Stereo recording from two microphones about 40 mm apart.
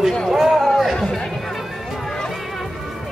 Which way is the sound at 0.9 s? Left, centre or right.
Centre.